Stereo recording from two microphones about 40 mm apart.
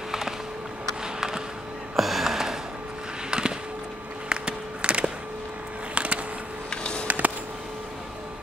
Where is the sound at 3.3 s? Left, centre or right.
Right.